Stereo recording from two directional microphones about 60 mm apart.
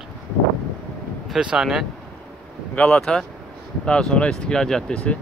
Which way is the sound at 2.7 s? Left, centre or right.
Left.